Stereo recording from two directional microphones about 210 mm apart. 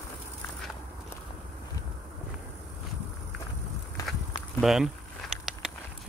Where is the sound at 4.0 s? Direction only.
15° left (ahead or behind).